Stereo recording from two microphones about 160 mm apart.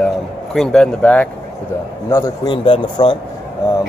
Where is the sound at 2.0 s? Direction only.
20° left (ahead or behind).